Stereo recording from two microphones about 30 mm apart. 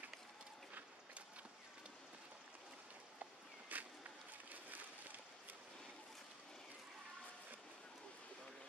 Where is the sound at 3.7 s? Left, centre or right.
Right.